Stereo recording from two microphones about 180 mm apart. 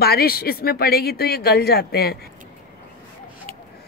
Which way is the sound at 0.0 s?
60° left (ahead or behind).